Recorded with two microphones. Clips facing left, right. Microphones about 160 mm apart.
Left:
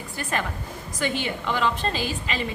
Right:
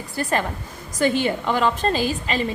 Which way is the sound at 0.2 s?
35° right (ahead or behind).